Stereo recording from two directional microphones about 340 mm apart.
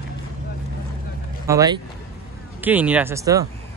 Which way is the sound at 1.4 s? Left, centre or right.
Centre.